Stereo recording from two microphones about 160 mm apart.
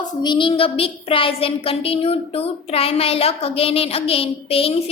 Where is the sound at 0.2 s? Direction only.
30° left (ahead or behind).